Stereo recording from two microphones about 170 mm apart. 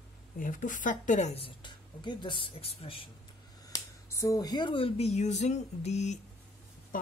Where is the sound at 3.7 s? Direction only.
15° left (ahead or behind); by 6.2 s 40° left (ahead or behind).